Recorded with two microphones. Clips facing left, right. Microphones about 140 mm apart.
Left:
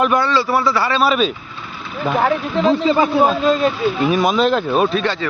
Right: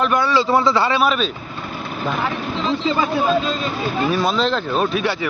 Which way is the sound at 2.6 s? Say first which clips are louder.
Left 6 dB; 50° left (ahead or behind).